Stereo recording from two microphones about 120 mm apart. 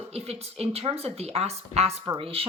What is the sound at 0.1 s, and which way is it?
A woman's voice, 55° right (ahead or behind).